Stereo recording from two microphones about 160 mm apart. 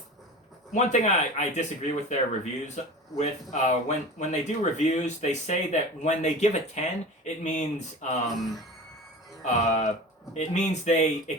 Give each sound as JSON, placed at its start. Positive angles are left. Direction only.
{"t": 0.7, "sound": "speech", "side_deg": 50}
{"t": 9.4, "sound": "speech", "side_deg": 45}